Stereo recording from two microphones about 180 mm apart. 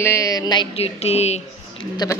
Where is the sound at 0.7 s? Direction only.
35° left (ahead or behind).